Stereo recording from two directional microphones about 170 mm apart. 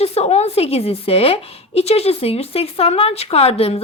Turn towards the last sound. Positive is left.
turn(degrees=35)  # may be behind; listen again after turning